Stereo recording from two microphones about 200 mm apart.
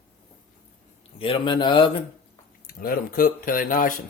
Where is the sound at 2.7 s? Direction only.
45° left (ahead or behind).